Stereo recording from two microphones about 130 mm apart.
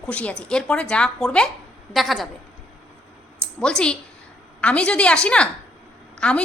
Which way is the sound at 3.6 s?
5° left (ahead or behind).